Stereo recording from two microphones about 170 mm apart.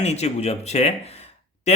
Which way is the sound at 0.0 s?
40° left (ahead or behind).